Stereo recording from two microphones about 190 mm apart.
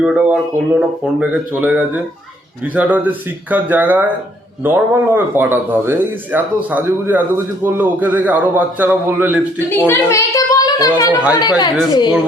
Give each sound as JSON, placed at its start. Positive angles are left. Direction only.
{"t": 0.0, "sound": "speech", "side_deg": -5}
{"t": 9.6, "sound": "a woman's voice", "side_deg": 10}